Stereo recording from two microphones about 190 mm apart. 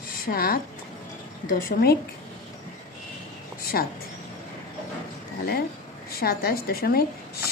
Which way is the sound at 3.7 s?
55° left (ahead or behind).